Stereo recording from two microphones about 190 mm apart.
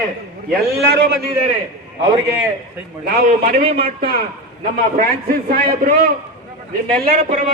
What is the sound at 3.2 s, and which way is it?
A man's voice, 50° right (ahead or behind).